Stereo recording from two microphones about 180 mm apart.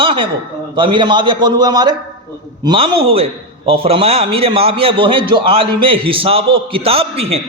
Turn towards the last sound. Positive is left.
turn(degrees=-35)  # may be behind; listen again after turning